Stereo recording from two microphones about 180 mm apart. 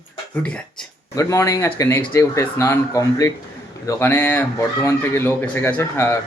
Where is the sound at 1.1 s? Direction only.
15° left (ahead or behind).